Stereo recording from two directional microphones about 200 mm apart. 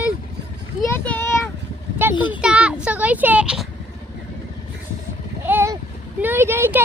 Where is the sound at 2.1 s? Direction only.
25° left (ahead or behind).